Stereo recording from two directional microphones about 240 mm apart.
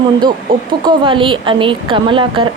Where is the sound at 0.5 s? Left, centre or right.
Centre.